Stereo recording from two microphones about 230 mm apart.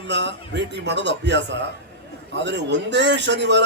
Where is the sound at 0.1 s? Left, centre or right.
Right.